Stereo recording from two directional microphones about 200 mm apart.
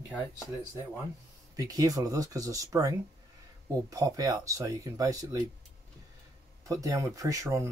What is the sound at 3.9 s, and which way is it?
Speech, 15° right (ahead or behind).